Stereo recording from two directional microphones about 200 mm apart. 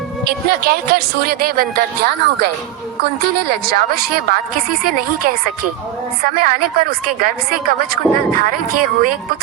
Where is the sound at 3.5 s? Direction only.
50° right (ahead or behind).